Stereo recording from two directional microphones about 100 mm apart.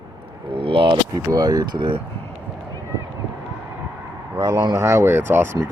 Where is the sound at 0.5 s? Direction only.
65° right (ahead or behind).